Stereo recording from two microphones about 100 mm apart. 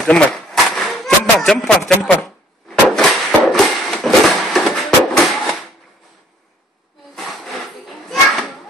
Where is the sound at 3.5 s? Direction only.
Centre (ahead or behind).